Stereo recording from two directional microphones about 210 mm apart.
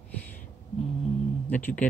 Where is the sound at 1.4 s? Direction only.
10° left (ahead or behind).